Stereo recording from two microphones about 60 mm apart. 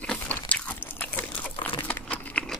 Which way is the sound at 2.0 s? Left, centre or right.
Left.